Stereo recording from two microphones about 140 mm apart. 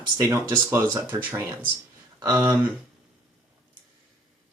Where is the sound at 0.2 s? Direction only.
25° right (ahead or behind); by 2.6 s 10° right (ahead or behind).